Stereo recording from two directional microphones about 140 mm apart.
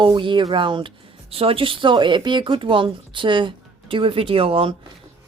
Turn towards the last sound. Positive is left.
turn(degrees=-40)  # may be behind; listen again after turning